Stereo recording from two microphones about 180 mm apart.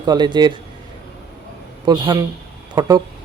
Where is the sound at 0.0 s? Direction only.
25° right (ahead or behind).